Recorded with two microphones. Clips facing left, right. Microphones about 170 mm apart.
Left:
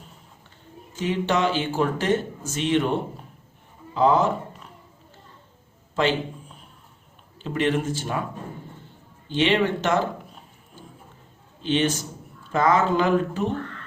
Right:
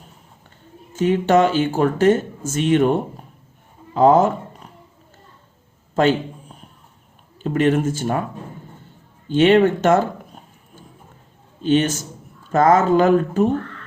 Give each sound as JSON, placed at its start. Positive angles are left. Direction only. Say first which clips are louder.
{"t": 0.9, "sound": "speech", "louder": "right 8 dB", "side_deg": -50}
{"t": 3.9, "sound": "speech", "louder": "right 6 dB", "side_deg": -50}
{"t": 6.0, "sound": "speech", "louder": "right 6 dB", "side_deg": -50}
{"t": 7.4, "sound": "speech", "louder": "right 6 dB", "side_deg": -45}
{"t": 9.3, "sound": "speech", "louder": "right 8 dB", "side_deg": -50}
{"t": 11.6, "sound": "speech", "louder": "right 5 dB", "side_deg": -45}